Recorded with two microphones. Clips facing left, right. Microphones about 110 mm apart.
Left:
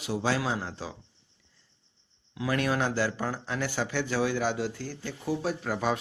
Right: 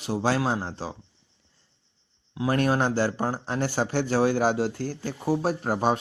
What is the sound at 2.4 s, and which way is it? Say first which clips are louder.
Speech: right 4 dB; 35° right (ahead or behind).